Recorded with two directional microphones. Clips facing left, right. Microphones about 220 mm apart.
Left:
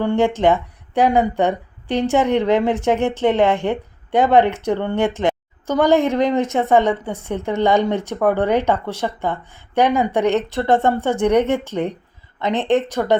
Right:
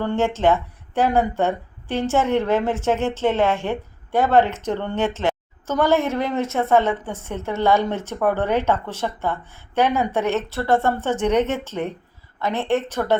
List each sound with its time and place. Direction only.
0.0 s a woman's voice: 10° left (ahead or behind)